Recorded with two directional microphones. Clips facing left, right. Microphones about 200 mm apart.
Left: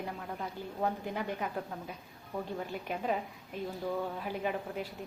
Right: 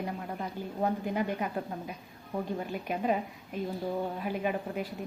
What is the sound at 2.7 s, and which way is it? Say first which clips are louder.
Speech: right 4 dB; 10° right (ahead or behind).